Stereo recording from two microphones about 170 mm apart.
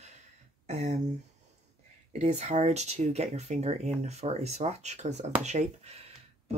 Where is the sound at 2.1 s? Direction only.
40° right (ahead or behind).